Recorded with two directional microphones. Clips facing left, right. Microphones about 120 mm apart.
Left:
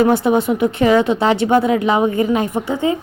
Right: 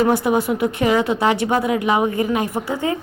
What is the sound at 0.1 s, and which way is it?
Speech, 25° left (ahead or behind).